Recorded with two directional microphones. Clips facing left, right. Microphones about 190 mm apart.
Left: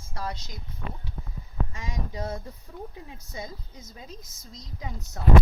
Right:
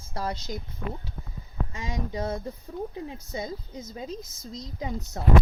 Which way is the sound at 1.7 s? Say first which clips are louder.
Right 4 dB; 30° right (ahead or behind).